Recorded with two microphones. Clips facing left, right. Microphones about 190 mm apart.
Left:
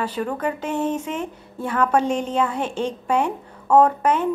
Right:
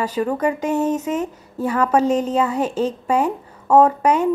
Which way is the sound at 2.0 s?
35° right (ahead or behind).